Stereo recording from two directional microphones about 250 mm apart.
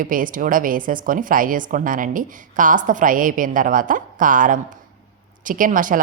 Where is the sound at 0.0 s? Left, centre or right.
Right.